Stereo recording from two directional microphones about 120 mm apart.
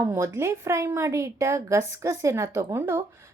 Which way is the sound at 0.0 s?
20° right (ahead or behind).